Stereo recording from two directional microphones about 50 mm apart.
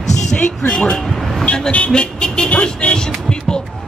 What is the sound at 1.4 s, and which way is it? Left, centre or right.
Speech, left.